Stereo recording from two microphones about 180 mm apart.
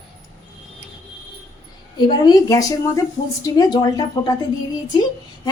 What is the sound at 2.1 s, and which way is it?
Speech, 20° left (ahead or behind).